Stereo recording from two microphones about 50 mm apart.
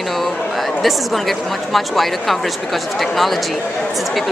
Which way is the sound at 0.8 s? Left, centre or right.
Centre.